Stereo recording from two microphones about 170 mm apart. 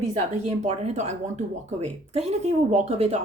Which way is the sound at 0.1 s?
40° right (ahead or behind).